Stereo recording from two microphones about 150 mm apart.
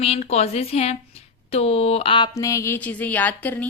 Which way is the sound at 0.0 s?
45° left (ahead or behind).